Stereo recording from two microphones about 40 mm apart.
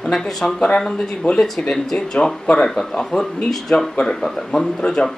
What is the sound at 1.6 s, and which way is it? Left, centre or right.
Speech, left.